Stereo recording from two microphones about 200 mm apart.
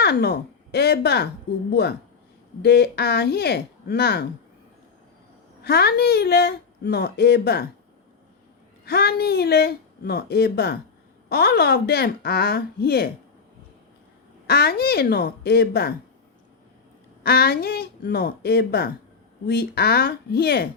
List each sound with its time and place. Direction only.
0.0 s speech: 55° left (ahead or behind)
5.6 s speech: 50° left (ahead or behind)
8.8 s speech: 55° left (ahead or behind)
14.4 s speech: 55° left (ahead or behind)
17.2 s speech: 50° left (ahead or behind)